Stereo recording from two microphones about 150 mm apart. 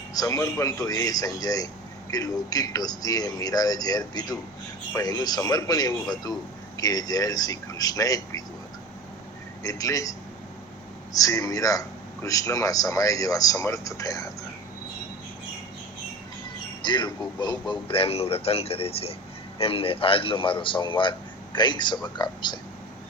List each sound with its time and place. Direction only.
0.1 s a man's voice: 20° left (ahead or behind)
9.6 s speech: 20° left (ahead or behind)
16.8 s a man's voice: 30° left (ahead or behind)